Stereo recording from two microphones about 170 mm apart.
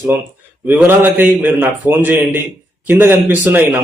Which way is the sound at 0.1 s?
10° right (ahead or behind).